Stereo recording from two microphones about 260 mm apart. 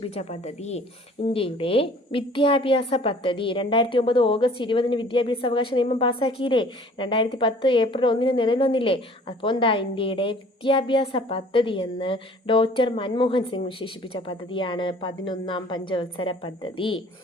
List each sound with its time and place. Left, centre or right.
0.0 s a woman's voice: left